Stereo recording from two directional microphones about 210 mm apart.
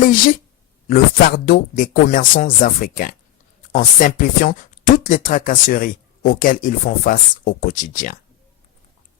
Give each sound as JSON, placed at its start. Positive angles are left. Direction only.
{"t": 0.0, "sound": "speech", "side_deg": 40}